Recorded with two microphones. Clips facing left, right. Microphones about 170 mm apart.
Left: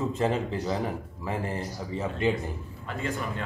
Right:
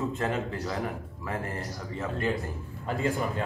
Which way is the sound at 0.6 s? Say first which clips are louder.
Left 3 dB; 25° left (ahead or behind).